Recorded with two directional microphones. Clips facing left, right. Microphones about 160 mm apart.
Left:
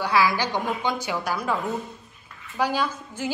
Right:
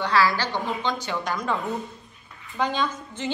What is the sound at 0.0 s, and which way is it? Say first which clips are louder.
A woman's voice: even; 10° left (ahead or behind).